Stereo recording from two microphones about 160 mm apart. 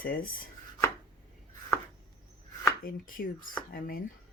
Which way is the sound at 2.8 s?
60° left (ahead or behind).